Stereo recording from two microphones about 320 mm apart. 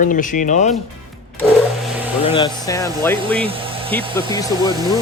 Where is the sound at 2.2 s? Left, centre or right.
Centre.